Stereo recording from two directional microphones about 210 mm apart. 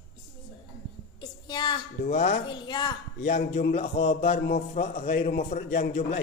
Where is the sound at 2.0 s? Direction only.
35° left (ahead or behind).